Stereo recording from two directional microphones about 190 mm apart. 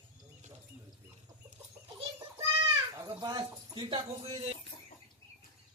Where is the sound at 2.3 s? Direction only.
20° right (ahead or behind).